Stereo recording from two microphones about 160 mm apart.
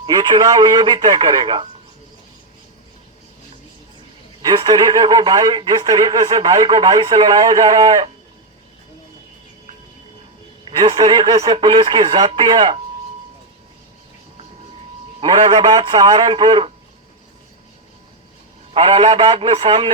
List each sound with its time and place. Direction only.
0.0 s speech: 25° right (ahead or behind)
4.4 s speech: 25° right (ahead or behind)
10.7 s speech: 30° right (ahead or behind)
15.2 s speech: 25° right (ahead or behind)
18.7 s a man's voice: 35° right (ahead or behind)